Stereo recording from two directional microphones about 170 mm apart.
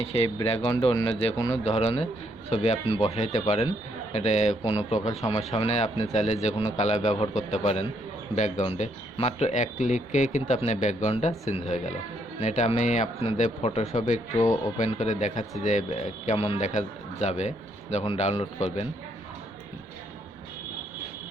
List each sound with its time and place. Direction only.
0.4 s a man's voice: 35° left (ahead or behind)
16.4 s a man's voice: 35° left (ahead or behind)
16.6 s a man's voice: 45° left (ahead or behind)